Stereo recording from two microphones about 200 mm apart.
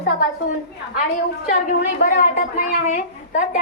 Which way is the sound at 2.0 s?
40° left (ahead or behind).